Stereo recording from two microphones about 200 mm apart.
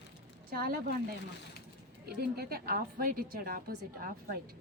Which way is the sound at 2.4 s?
50° right (ahead or behind).